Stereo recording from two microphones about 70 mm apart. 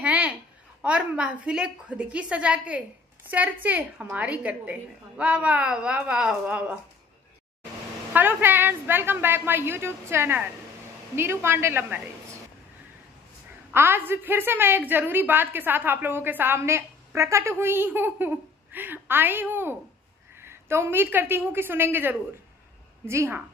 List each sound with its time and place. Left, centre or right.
0.0 s a sound: centre
0.8 s a woman's voice: centre
8.1 s a woman's voice: right
13.7 s a woman's voice: right